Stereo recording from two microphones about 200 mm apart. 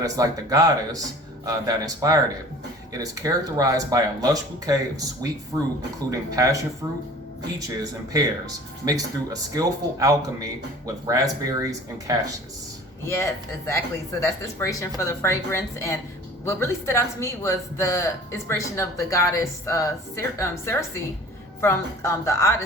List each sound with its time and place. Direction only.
0.0 s speech: 15° right (ahead or behind)
8.1 s speech: 20° right (ahead or behind)
13.1 s speech: 15° left (ahead or behind)